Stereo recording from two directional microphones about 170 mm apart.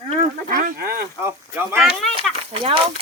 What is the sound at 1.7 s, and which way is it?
Speech, 5° right (ahead or behind).